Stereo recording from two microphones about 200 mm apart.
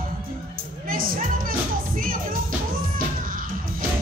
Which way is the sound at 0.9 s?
45° right (ahead or behind).